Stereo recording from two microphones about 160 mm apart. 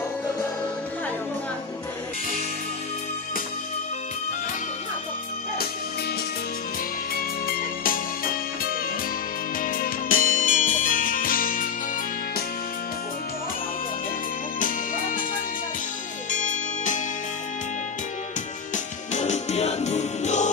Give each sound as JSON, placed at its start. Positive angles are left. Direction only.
{"t": 7.2, "sound": "music", "side_deg": 65}
{"t": 16.3, "sound": "music", "side_deg": 50}
{"t": 19.1, "sound": "music", "side_deg": 45}